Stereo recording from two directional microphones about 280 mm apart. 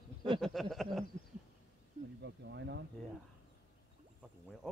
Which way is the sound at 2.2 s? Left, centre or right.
Right.